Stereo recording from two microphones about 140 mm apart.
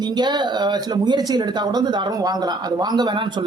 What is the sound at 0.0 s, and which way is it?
A woman's voice, 30° right (ahead or behind).